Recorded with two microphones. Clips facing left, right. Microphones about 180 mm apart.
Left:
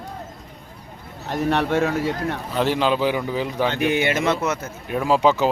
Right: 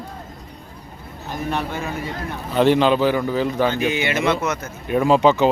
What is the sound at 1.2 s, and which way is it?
Speech, 75° left (ahead or behind).